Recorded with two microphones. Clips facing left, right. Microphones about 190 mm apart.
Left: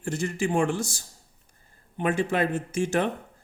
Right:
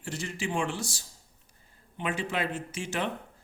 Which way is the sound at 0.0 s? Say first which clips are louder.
Left 7 dB; 50° left (ahead or behind).